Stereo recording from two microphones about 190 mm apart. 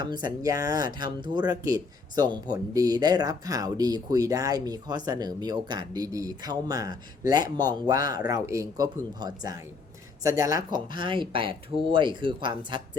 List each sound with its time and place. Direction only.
0.0 s speech: 20° right (ahead or behind)